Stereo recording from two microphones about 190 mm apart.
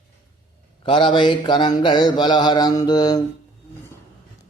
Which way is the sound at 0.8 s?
25° left (ahead or behind).